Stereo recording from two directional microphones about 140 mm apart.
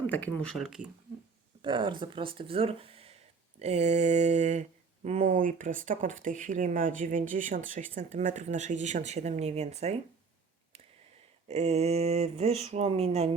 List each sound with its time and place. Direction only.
0.1 s speech: 10° left (ahead or behind)
0.6 s speech: 5° right (ahead or behind)
1.6 s speech: 35° right (ahead or behind); by 4.6 s 60° right (ahead or behind)
5.2 s speech: 70° right (ahead or behind); by 9.9 s 50° right (ahead or behind)
11.4 s speech: 50° right (ahead or behind)